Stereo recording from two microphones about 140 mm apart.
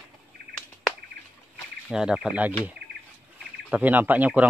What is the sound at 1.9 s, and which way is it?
Speech, 5° right (ahead or behind).